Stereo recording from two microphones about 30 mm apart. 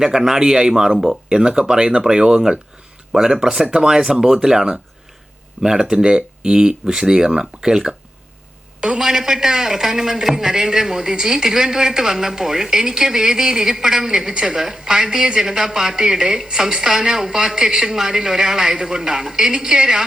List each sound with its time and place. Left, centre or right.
0.0 s a man's voice: centre
5.8 s a man's voice: right
9.0 s a man's voice: centre